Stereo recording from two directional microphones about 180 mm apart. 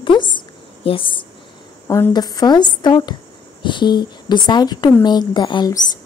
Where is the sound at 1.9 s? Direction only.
15° left (ahead or behind).